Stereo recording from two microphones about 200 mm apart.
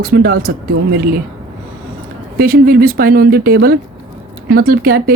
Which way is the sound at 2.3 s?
45° right (ahead or behind).